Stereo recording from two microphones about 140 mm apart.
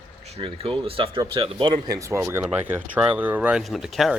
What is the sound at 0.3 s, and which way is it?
Speech, 45° right (ahead or behind).